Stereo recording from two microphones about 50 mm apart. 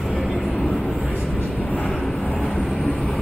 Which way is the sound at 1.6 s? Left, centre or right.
Left.